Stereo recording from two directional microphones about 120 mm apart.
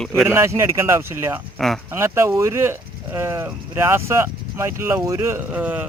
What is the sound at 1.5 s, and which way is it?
Speech, centre (ahead or behind).